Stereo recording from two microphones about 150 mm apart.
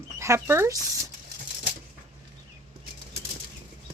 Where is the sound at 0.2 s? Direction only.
20° right (ahead or behind).